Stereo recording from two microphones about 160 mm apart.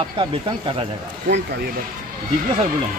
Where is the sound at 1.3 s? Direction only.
90° right.